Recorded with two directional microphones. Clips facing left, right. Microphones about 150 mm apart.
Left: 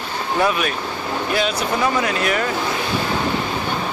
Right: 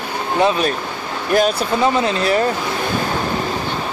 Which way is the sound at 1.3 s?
45° right (ahead or behind).